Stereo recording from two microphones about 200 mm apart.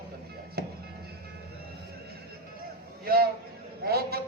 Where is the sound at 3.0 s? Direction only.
50° right (ahead or behind).